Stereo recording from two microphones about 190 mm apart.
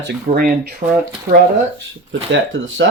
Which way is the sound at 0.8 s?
40° right (ahead or behind).